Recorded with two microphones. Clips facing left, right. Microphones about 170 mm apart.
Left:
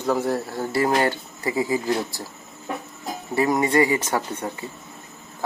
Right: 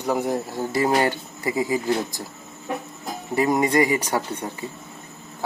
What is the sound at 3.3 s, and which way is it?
Speech, 20° right (ahead or behind).